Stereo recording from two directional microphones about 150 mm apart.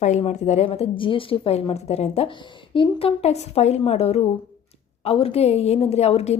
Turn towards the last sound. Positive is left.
turn(degrees=45)  # may be behind; listen again after turning